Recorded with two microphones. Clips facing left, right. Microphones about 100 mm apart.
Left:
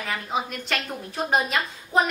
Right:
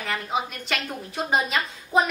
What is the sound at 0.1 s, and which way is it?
A woman's voice, centre (ahead or behind).